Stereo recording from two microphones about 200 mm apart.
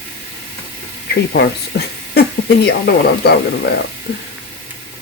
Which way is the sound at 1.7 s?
55° left (ahead or behind).